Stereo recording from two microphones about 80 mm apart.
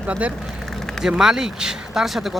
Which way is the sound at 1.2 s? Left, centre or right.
Centre.